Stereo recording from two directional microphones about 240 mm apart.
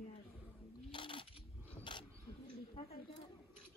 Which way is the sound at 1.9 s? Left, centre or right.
Centre.